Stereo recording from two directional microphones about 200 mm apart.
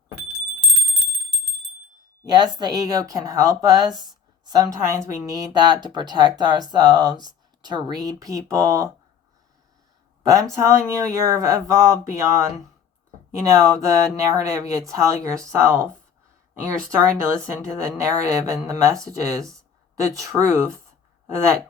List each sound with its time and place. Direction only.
2.2 s a woman's voice: 20° right (ahead or behind)
10.5 s a woman's voice: 15° right (ahead or behind)
16.9 s a woman's voice: 15° right (ahead or behind)